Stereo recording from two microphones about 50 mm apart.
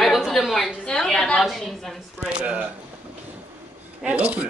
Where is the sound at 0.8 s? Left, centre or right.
Centre.